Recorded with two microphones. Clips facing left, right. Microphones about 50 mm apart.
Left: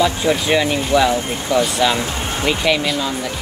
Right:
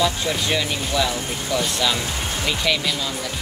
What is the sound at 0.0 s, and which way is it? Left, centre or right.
Speech, left.